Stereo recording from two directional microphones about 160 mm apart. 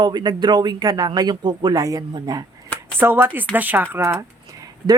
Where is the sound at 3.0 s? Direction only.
15° right (ahead or behind).